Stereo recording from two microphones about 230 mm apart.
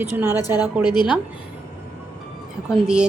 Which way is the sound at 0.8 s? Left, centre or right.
Centre.